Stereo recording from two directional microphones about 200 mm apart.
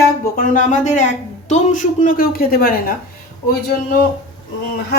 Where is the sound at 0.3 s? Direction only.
40° left (ahead or behind).